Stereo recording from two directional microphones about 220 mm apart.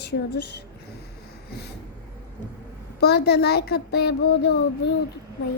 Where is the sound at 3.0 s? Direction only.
50° left (ahead or behind).